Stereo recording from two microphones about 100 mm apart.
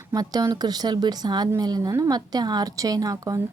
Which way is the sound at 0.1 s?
40° right (ahead or behind).